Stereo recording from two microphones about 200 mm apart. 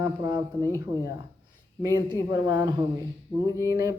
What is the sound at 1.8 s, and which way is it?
Speech, 20° right (ahead or behind).